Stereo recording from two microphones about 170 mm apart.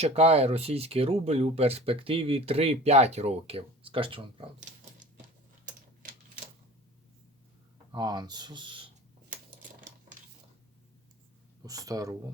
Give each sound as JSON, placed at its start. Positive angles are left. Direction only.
{"t": 0.0, "sound": "speech", "side_deg": -40}
{"t": 7.9, "sound": "speech", "side_deg": -25}
{"t": 11.6, "sound": "speech", "side_deg": -20}